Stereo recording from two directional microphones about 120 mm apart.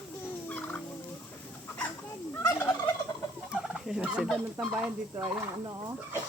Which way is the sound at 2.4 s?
20° left (ahead or behind).